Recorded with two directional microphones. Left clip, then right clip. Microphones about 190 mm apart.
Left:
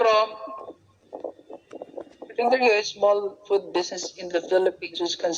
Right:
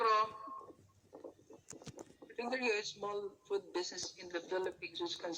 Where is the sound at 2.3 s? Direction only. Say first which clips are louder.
Left 17 dB; 40° left (ahead or behind).